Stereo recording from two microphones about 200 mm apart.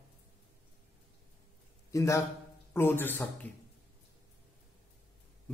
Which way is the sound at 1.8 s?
15° left (ahead or behind).